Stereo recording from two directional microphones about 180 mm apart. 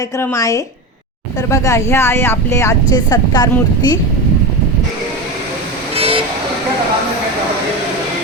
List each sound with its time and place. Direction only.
0.2 s speech: 15° left (ahead or behind)
6.0 s vehicle: 30° right (ahead or behind)